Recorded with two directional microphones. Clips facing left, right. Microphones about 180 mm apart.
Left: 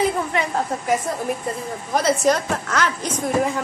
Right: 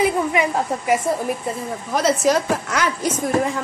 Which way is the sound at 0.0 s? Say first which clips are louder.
Right 3 dB; 10° right (ahead or behind).